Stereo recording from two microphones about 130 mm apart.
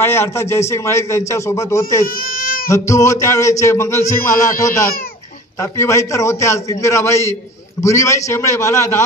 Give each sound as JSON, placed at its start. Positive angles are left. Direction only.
{"t": 0.0, "sound": "a man's voice", "side_deg": 20}
{"t": 2.0, "sound": "baby cry", "side_deg": 90}
{"t": 2.7, "sound": "a man's voice", "side_deg": 25}